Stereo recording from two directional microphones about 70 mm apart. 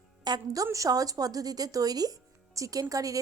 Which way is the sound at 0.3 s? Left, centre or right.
Right.